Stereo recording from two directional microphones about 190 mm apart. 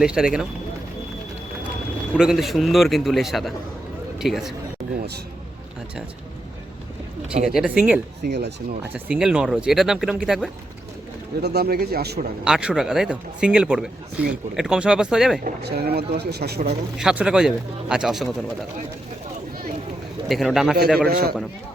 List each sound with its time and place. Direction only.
0.0 s speech: 5° right (ahead or behind)
2.1 s speech: 5° right (ahead or behind)
7.4 s speech: 5° right (ahead or behind)
8.2 s speech: 60° right (ahead or behind)
8.8 s speech: 10° right (ahead or behind)
11.4 s speech: 55° right (ahead or behind)
12.5 s speech: 5° right (ahead or behind)
15.4 s speech: 55° right (ahead or behind)
17.0 s speech: 5° right (ahead or behind)
20.2 s speech: centre (ahead or behind)
21.1 s speech: 50° right (ahead or behind)